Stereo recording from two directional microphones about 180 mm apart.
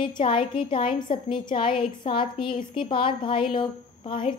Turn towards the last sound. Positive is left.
turn(degrees=30)  # may be behind; listen again after turning